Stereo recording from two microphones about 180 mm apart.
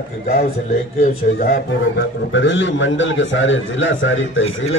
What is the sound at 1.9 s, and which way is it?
A man's voice, 85° left.